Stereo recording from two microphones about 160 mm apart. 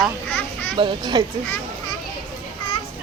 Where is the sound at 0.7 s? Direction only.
30° right (ahead or behind).